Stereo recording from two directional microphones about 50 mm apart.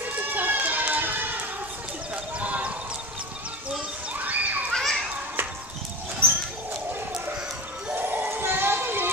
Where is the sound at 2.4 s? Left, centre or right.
Right.